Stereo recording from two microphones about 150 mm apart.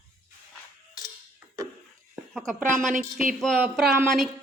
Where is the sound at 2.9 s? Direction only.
65° right (ahead or behind).